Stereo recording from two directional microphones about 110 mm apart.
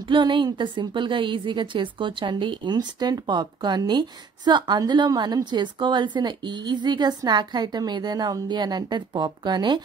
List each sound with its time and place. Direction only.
0.0 s a woman's voice: 45° right (ahead or behind)